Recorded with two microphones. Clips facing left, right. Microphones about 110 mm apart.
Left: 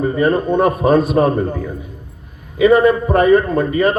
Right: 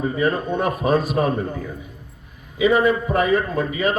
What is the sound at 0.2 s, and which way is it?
Speech, 45° left (ahead or behind).